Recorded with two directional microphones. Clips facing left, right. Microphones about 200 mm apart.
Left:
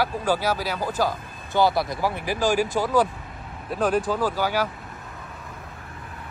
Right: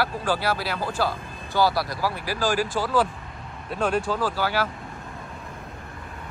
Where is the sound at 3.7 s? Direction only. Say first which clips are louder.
Left 2 dB; 5° left (ahead or behind).